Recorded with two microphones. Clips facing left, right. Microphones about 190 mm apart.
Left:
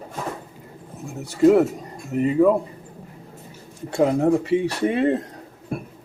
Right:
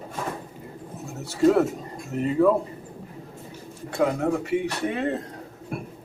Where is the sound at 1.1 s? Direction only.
15° left (ahead or behind).